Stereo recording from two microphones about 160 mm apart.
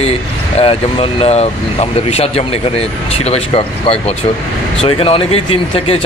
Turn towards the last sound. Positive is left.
turn(degrees=35)  # may be behind; listen again after turning